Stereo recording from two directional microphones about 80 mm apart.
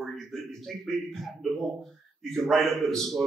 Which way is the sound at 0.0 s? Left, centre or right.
Centre.